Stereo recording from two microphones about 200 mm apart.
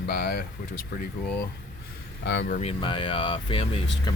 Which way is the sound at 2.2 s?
55° left (ahead or behind).